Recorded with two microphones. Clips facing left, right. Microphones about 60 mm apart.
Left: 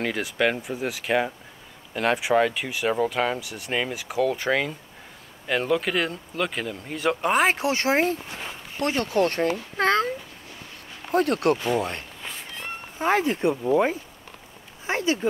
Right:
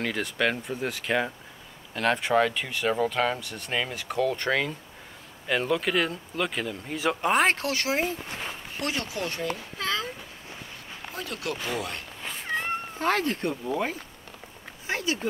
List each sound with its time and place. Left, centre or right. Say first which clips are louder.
0.0 s speech: left 3 dB; centre
7.7 s speech: left 5 dB; left
11.1 s speech: left 13 dB; left
13.0 s speech: left 5 dB; centre